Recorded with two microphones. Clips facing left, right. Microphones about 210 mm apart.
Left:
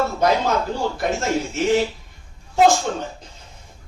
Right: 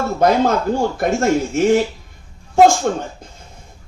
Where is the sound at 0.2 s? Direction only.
50° right (ahead or behind).